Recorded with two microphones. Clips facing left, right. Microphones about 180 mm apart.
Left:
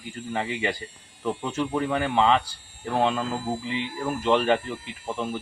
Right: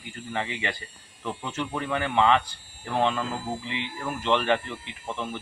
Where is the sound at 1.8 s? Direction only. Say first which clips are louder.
Even; 35° left (ahead or behind).